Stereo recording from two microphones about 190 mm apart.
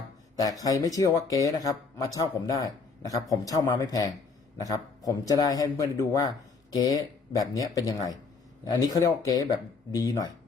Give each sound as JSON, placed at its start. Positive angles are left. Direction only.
{"t": 0.3, "sound": "speech", "side_deg": 20}